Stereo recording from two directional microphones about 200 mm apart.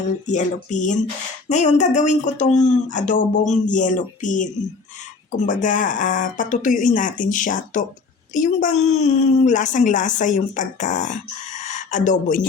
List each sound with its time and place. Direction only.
0.3 s a woman's voice: 35° left (ahead or behind)
5.5 s a woman's voice: 40° left (ahead or behind)